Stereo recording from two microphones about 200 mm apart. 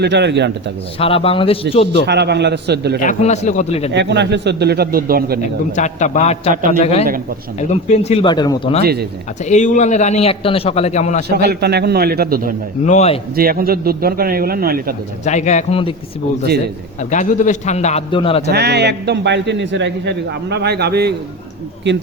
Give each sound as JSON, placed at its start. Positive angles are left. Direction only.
{"t": 0.0, "sound": "a man's voice", "side_deg": -60}
{"t": 0.9, "sound": "a man's voice", "side_deg": 30}
{"t": 1.9, "sound": "a man's voice", "side_deg": -55}
{"t": 3.0, "sound": "a man's voice", "side_deg": 35}
{"t": 3.9, "sound": "a man's voice", "side_deg": -60}
{"t": 5.7, "sound": "a man's voice", "side_deg": 35}
{"t": 8.8, "sound": "a man's voice", "side_deg": -50}
{"t": 9.4, "sound": "a man's voice", "side_deg": 35}
{"t": 11.3, "sound": "a man's voice", "side_deg": -50}
{"t": 12.8, "sound": "a man's voice", "side_deg": 35}
{"t": 13.3, "sound": "a man's voice", "side_deg": -50}
{"t": 15.2, "sound": "a man's voice", "side_deg": 35}
{"t": 17.0, "sound": "a man's voice", "side_deg": 40}
{"t": 18.5, "sound": "a man's voice", "side_deg": -55}